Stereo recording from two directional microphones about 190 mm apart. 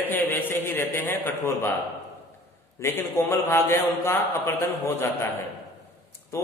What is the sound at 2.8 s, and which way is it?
A man's voice, 15° left (ahead or behind).